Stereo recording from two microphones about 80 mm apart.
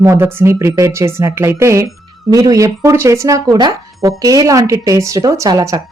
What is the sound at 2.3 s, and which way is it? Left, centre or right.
Speech, right.